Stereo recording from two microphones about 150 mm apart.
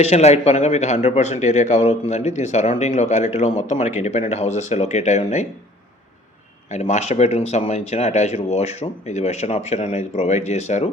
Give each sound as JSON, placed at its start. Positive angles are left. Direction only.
{"t": 0.0, "sound": "speech", "side_deg": 45}
{"t": 6.7, "sound": "speech", "side_deg": 50}